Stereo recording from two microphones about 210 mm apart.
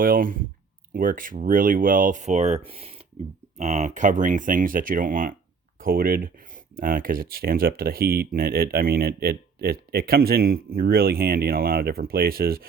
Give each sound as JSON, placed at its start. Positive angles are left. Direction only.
{"t": 0.0, "sound": "speech", "side_deg": -40}